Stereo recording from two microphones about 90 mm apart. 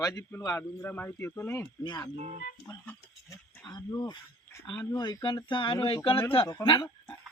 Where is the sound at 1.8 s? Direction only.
55° left (ahead or behind).